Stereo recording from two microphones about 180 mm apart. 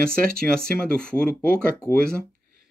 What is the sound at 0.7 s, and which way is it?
Speech, 55° right (ahead or behind).